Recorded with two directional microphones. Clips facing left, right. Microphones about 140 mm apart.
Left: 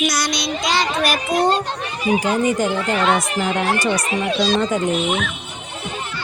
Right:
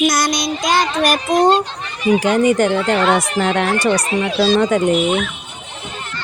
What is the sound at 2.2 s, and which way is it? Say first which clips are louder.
Speech: right 6 dB; 75° right (ahead or behind).